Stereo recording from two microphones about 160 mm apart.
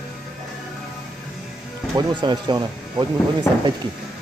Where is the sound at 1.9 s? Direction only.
30° right (ahead or behind).